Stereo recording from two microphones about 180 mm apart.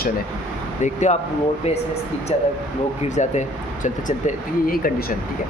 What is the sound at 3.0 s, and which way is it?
Speech, 40° left (ahead or behind).